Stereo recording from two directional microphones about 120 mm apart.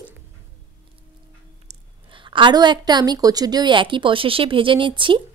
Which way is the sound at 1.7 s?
65° right (ahead or behind).